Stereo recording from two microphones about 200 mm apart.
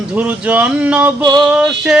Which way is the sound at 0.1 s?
5° right (ahead or behind).